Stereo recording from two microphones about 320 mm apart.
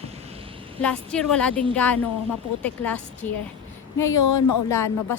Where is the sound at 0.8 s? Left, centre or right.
Centre.